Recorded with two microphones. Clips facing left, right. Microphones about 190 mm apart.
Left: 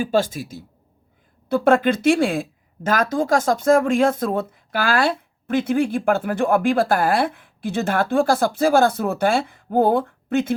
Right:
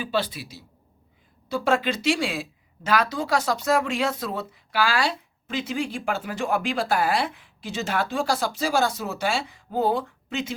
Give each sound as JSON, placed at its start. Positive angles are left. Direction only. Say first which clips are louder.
{"t": 0.0, "sound": "speech", "louder": "left 7 dB", "side_deg": 45}